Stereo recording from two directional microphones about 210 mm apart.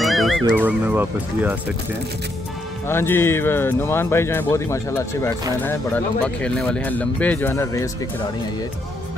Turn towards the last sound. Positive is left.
turn(degrees=15)  # may be behind; listen again after turning